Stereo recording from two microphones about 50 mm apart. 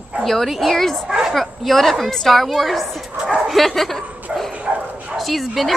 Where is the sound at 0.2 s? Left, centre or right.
Centre.